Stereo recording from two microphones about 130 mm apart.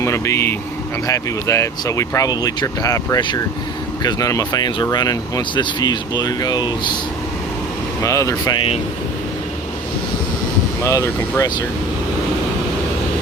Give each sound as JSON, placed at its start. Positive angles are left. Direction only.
{"t": 0.0, "sound": "speech", "side_deg": 20}
{"t": 8.0, "sound": "speech", "side_deg": 25}
{"t": 8.5, "sound": "speech", "side_deg": 45}
{"t": 10.8, "sound": "speech", "side_deg": 25}